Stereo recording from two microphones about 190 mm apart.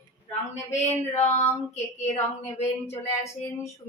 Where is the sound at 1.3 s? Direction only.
35° left (ahead or behind).